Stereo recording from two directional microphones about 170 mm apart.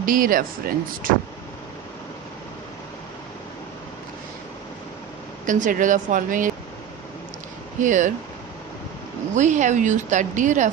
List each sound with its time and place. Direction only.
0.0 s speech: 55° right (ahead or behind)
5.5 s speech: 50° right (ahead or behind)
7.8 s speech: 50° right (ahead or behind)
9.3 s speech: 45° right (ahead or behind)